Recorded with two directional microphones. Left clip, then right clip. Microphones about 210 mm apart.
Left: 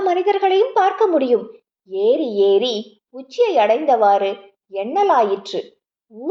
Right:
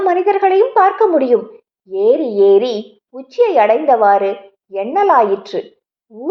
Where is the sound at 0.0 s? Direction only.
15° right (ahead or behind).